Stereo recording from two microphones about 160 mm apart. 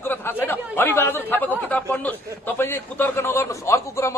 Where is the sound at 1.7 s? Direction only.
10° left (ahead or behind).